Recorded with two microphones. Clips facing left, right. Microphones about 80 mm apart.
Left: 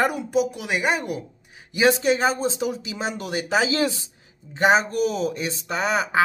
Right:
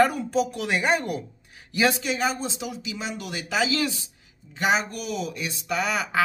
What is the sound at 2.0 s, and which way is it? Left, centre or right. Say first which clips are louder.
Speech: left 6 dB; left.